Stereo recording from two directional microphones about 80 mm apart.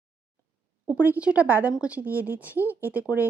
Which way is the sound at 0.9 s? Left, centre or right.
Right.